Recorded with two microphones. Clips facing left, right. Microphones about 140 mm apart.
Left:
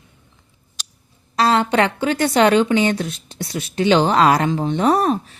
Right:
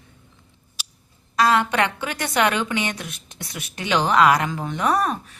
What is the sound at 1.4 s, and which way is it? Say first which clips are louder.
A woman's voice: left 3 dB; 30° left (ahead or behind).